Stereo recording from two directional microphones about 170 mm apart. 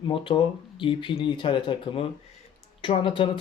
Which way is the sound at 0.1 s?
30° left (ahead or behind).